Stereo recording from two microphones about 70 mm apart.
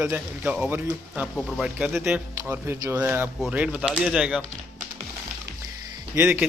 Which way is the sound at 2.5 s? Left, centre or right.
Right.